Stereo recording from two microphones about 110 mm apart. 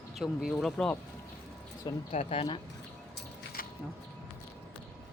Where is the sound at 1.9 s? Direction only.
40° left (ahead or behind).